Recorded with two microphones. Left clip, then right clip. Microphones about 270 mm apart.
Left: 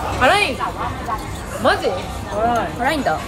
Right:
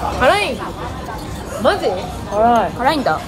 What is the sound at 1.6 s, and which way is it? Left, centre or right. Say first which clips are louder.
Speech: right 1 dB; right.